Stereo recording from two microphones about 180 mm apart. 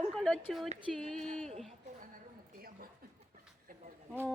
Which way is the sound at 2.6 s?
55° right (ahead or behind).